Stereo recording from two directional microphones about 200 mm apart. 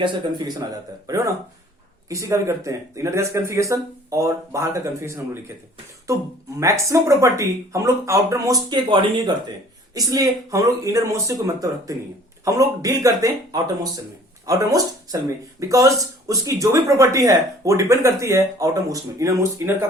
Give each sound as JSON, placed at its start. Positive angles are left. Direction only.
{"t": 0.0, "sound": "speech", "side_deg": -25}
{"t": 6.6, "sound": "speech", "side_deg": -15}